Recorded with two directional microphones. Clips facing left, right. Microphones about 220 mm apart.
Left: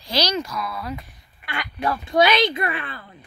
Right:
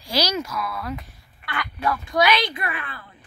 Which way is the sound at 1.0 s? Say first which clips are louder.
Even; 15° left (ahead or behind).